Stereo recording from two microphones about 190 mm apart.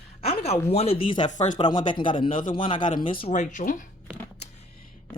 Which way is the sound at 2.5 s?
25° left (ahead or behind).